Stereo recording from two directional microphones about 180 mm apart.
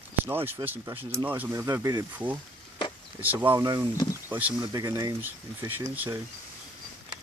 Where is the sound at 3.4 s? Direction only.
20° right (ahead or behind).